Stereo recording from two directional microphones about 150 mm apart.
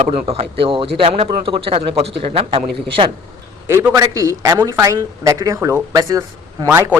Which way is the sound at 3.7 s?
15° right (ahead or behind).